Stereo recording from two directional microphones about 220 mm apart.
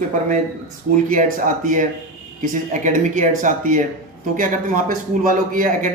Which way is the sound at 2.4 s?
35° right (ahead or behind).